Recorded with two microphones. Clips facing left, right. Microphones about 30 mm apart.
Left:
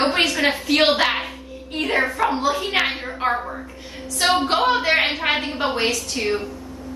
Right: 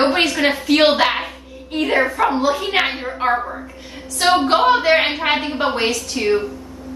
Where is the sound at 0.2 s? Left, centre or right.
Centre.